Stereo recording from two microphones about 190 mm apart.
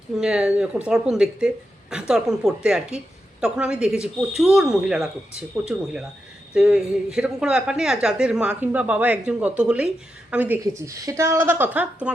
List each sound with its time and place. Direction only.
0.2 s a woman's voice: 5° right (ahead or behind)